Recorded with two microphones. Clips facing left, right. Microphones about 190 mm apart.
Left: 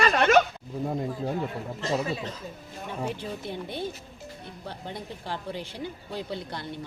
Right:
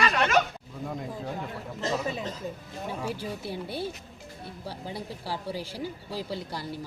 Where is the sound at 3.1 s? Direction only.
5° right (ahead or behind).